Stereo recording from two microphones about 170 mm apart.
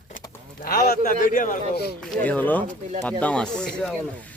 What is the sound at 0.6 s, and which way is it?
A man's voice, 60° left (ahead or behind).